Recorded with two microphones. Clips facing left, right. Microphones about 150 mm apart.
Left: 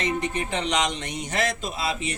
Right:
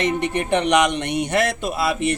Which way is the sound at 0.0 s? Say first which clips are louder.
Right 5 dB; 65° right (ahead or behind).